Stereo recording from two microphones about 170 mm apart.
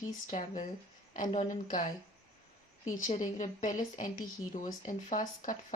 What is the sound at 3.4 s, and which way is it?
Speech, 45° left (ahead or behind).